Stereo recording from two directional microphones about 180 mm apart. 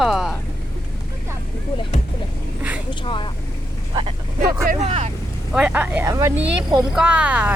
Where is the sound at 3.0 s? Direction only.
30° left (ahead or behind).